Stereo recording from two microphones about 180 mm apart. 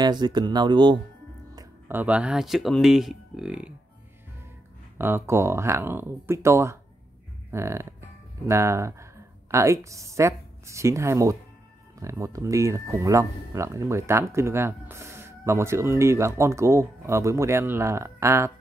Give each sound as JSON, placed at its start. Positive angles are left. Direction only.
{"t": 0.0, "sound": "speech", "side_deg": -25}
{"t": 4.9, "sound": "speech", "side_deg": -10}